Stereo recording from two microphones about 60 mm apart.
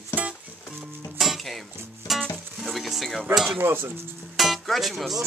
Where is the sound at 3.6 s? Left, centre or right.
Right.